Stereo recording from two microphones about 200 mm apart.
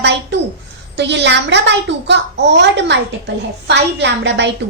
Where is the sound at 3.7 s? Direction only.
60° right (ahead or behind).